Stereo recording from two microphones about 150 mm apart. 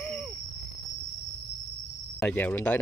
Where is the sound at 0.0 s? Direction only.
5° left (ahead or behind).